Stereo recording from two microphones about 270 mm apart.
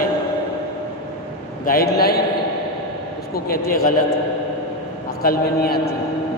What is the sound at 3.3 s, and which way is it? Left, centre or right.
Speech, left.